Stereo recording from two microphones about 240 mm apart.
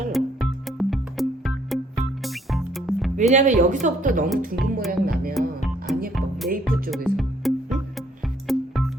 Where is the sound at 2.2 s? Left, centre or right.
Centre.